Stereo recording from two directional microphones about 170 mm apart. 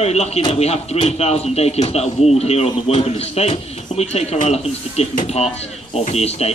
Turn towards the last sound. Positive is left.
turn(degrees=40)  # may be behind; listen again after turning